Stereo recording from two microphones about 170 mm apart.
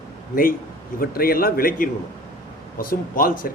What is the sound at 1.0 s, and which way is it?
A man's voice, 60° left (ahead or behind).